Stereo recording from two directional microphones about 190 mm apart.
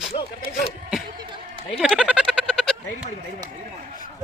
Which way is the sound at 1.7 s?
Centre (ahead or behind).